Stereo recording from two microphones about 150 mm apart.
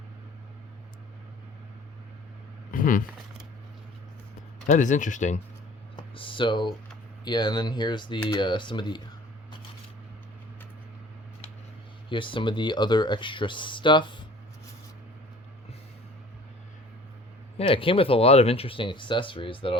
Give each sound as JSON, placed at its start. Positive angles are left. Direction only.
{"t": 2.7, "sound": "speech", "side_deg": 65}
{"t": 4.6, "sound": "speech", "side_deg": 55}
{"t": 6.0, "sound": "speech", "side_deg": 35}
{"t": 12.0, "sound": "speech", "side_deg": 35}
{"t": 17.6, "sound": "speech", "side_deg": 35}